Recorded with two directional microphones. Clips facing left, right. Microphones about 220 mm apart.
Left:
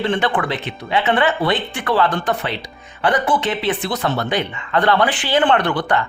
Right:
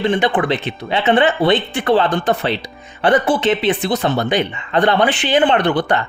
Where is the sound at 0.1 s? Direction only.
15° right (ahead or behind).